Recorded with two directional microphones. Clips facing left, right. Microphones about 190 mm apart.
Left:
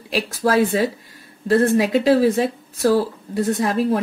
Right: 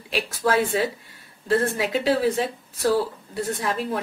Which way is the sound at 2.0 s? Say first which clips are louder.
Left 3 dB; 45° left (ahead or behind).